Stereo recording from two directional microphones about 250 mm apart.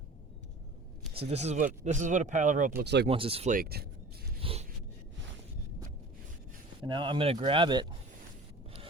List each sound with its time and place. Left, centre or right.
1.1 s speech: right
3.1 s speech: right
6.8 s speech: centre